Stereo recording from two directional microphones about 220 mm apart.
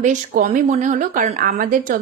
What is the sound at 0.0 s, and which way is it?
Speech, 35° right (ahead or behind).